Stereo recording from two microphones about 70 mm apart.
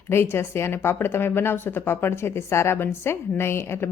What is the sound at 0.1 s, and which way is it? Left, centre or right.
Speech, left.